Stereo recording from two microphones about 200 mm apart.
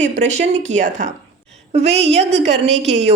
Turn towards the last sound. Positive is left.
turn(degrees=-30)  # may be behind; listen again after turning